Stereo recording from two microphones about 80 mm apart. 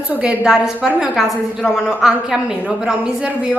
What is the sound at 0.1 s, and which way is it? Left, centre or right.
A woman's voice, centre.